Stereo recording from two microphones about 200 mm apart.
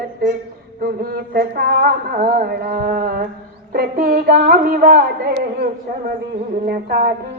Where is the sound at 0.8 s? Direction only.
50° right (ahead or behind).